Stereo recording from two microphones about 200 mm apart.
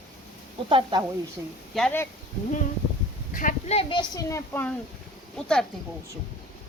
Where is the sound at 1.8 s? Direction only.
5° left (ahead or behind).